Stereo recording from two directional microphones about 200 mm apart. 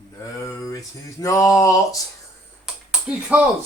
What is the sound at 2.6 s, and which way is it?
Computer keyboard, 5° right (ahead or behind).